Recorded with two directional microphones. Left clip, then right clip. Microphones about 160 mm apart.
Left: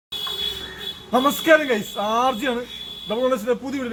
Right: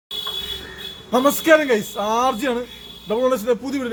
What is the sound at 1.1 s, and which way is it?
A man's voice, 40° right (ahead or behind).